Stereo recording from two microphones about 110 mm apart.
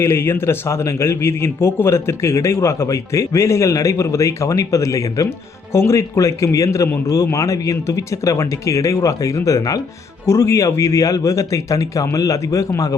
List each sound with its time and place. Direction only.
0.0 s a man's voice: 20° left (ahead or behind)